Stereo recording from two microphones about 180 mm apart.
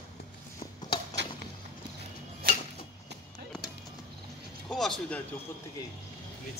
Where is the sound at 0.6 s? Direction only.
30° left (ahead or behind).